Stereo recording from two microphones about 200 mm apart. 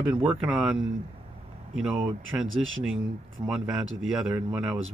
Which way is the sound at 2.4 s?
80° right.